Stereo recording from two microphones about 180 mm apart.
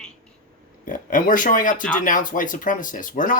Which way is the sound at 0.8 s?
50° left (ahead or behind).